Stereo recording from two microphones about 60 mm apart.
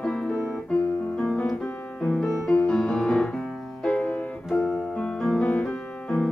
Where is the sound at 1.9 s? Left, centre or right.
Centre; by 4.5 s left.